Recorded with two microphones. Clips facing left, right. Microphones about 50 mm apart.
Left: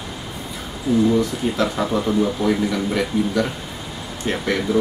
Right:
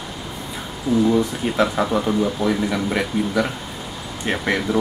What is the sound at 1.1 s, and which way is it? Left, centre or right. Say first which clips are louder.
Speech: even; centre.